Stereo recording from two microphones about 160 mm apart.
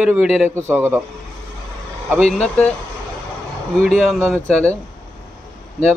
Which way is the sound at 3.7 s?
Centre (ahead or behind).